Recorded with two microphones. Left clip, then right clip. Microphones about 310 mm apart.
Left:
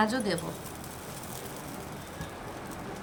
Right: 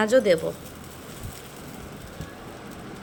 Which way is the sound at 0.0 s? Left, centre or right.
Centre.